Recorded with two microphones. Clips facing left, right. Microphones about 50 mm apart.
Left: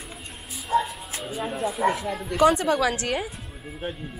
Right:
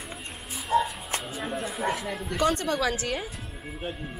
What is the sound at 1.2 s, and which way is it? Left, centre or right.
A woman's voice, centre.